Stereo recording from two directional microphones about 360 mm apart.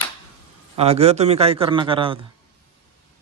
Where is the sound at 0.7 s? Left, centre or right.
Centre.